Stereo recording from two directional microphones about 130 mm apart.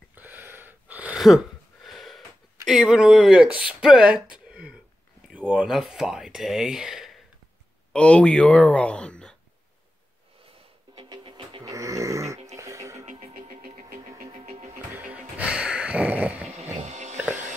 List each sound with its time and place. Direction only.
0.1 s a sound: 15° right (ahead or behind)
2.6 s speech: 5° right (ahead or behind)
4.5 s a sound: 5° right (ahead or behind)
5.3 s speech: 10° right (ahead or behind)
7.9 s speech: 10° left (ahead or behind)
11.0 s music: 35° right (ahead or behind)
11.7 s a sound: 25° right (ahead or behind)
12.5 s music: 20° right (ahead or behind)
13.0 s music: 90° right
15.0 s music: 10° right (ahead or behind)
16.5 s music: 60° right (ahead or behind)